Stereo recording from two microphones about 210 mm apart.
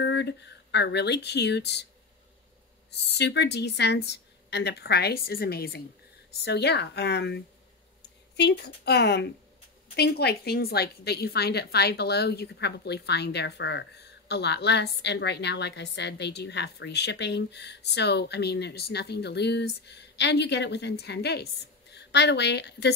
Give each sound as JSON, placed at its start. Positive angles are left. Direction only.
{"t": 0.0, "sound": "speech", "side_deg": 55}
{"t": 2.9, "sound": "a woman's voice", "side_deg": 55}